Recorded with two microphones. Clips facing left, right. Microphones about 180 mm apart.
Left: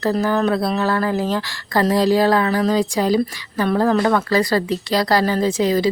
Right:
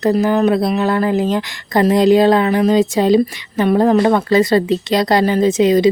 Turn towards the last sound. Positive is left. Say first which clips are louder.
# right 6 dB
turn(degrees=-20)  # may be behind; listen again after turning